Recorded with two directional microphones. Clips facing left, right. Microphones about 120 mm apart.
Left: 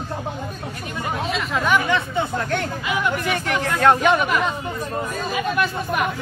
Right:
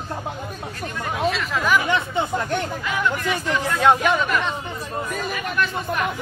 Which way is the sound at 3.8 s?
10° right (ahead or behind).